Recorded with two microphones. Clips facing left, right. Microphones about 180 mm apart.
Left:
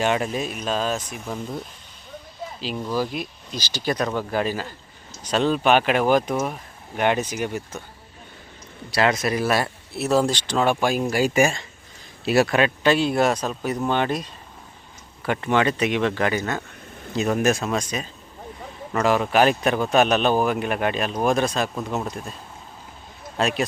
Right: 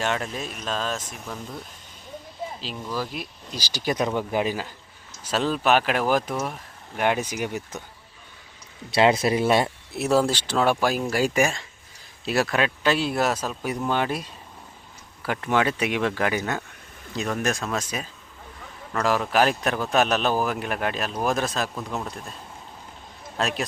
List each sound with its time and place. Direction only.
0.0 s speech: 10° left (ahead or behind)
3.0 s speech: centre (ahead or behind)
3.8 s a man's voice: 15° right (ahead or behind)
6.4 s speech: 5° left (ahead or behind)
7.0 s speech: 5° right (ahead or behind)
9.0 s speech: 25° right (ahead or behind)
10.2 s a man's voice: 5° right (ahead or behind)
17.2 s a man's voice: 5° left (ahead or behind)
18.9 s a man's voice: 5° left (ahead or behind)
21.8 s speech: 20° left (ahead or behind)
23.4 s a man's voice: centre (ahead or behind)